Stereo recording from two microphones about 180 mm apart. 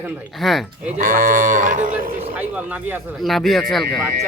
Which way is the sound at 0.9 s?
50° right (ahead or behind).